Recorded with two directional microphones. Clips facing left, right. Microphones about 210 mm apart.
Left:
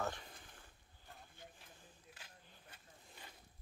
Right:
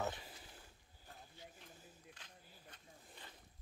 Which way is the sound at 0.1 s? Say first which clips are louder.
Even; 5° right (ahead or behind).